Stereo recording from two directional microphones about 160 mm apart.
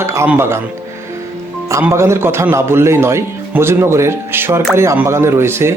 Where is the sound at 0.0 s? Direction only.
15° right (ahead or behind).